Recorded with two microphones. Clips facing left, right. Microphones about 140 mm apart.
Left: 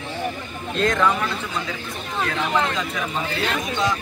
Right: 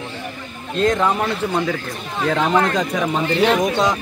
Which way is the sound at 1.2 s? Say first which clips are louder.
Right 7 dB; 55° right (ahead or behind).